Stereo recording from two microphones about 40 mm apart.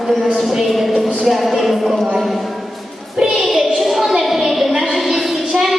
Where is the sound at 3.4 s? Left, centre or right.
Centre.